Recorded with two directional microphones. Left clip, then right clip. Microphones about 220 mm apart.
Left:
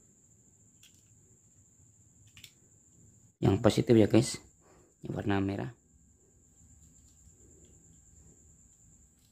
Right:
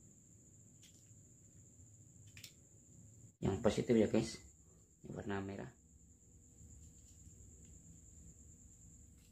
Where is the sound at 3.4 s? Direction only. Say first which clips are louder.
Left 9 dB; 50° left (ahead or behind).